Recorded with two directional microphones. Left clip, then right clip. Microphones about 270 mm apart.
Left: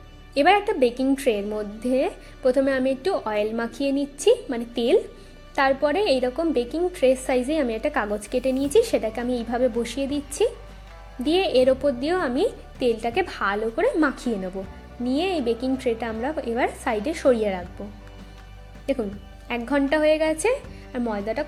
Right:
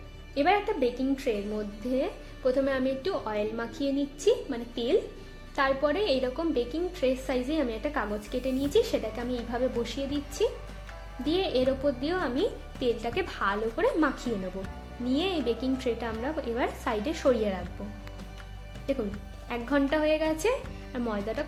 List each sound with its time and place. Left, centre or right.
0.3 s a woman's voice: left
18.9 s a woman's voice: left